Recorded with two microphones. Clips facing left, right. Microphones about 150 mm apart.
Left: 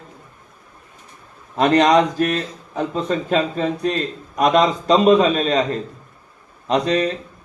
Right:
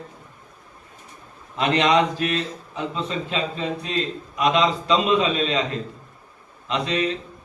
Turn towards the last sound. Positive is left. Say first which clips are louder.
# left 5 dB
turn(degrees=40)  # may be behind; listen again after turning